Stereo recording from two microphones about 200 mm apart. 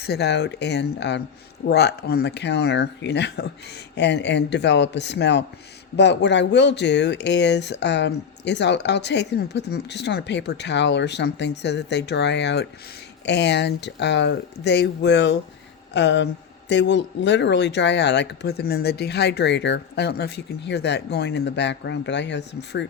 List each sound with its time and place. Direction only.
0.0 s a man's voice: 55° left (ahead or behind)